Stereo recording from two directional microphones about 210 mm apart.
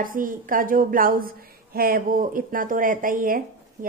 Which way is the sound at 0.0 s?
40° right (ahead or behind).